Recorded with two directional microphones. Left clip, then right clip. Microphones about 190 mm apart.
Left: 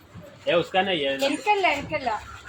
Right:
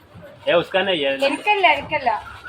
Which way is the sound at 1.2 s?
Centre (ahead or behind).